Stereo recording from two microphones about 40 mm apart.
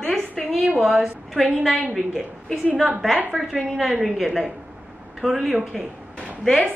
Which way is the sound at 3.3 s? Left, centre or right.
Centre.